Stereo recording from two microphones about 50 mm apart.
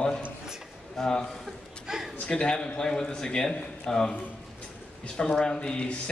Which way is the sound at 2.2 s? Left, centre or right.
Left.